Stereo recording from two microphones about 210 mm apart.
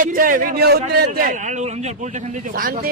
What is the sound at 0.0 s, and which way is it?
A man's voice, 40° right (ahead or behind).